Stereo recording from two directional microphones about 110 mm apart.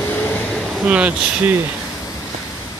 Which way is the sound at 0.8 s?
10° right (ahead or behind).